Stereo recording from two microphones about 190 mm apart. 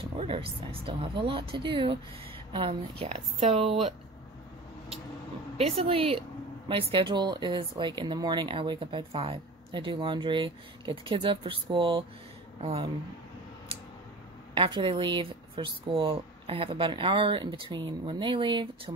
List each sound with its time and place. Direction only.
0.0 s speech: 30° right (ahead or behind)
5.6 s speech: 30° right (ahead or behind)
14.5 s speech: 25° right (ahead or behind)